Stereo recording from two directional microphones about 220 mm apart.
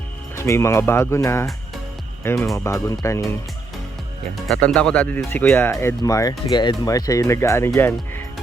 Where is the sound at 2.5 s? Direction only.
15° left (ahead or behind).